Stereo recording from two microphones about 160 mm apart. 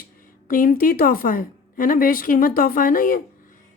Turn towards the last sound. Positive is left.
turn(degrees=60)  # may be behind; listen again after turning